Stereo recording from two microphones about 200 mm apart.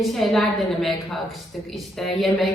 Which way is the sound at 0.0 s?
Centre (ahead or behind).